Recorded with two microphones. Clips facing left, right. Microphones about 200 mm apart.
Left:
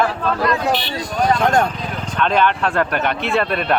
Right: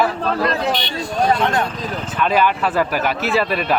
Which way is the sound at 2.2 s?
5° right (ahead or behind).